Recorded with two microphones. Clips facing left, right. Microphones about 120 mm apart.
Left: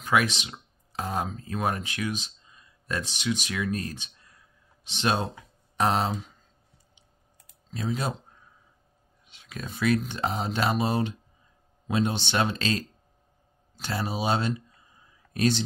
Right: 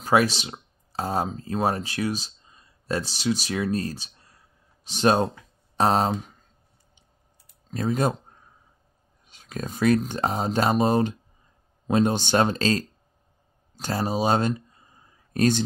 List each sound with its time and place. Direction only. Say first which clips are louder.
0.0 s speech: right 4 dB; 35° right (ahead or behind)
7.7 s speech: right 6 dB; 50° right (ahead or behind)
9.3 s speech: right 5 dB; 40° right (ahead or behind)
13.7 s a sound: right 5 dB; 40° right (ahead or behind)